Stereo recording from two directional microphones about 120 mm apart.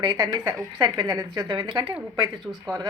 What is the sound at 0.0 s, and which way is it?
Speech, 35° right (ahead or behind).